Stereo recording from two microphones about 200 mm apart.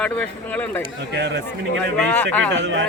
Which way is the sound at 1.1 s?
60° right (ahead or behind).